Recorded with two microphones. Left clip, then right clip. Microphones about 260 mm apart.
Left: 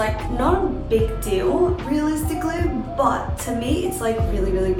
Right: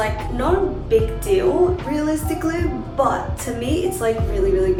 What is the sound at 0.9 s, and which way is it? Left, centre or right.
Music, centre.